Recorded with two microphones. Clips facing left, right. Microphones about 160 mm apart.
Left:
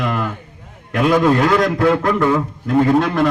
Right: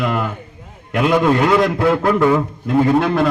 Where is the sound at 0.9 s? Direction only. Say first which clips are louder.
Left 1 dB; 5° right (ahead or behind).